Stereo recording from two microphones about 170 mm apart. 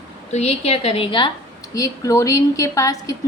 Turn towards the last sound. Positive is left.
turn(degrees=20)  # may be behind; listen again after turning